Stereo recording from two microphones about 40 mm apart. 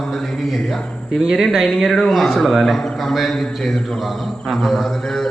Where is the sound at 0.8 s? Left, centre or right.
Left.